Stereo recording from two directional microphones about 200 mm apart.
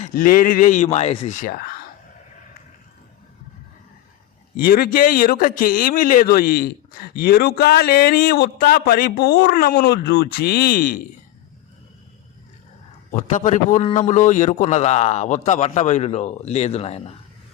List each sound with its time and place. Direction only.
0.0 s a man's voice: 45° left (ahead or behind)
4.5 s a man's voice: 50° left (ahead or behind)
13.1 s a man's voice: 40° left (ahead or behind)